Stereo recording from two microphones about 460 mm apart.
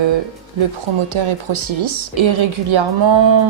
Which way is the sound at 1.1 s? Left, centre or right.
Right.